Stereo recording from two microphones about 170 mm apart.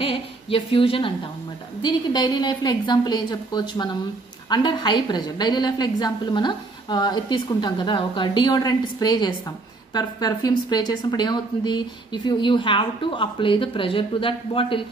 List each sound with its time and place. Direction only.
0.0 s a woman's voice: 30° left (ahead or behind)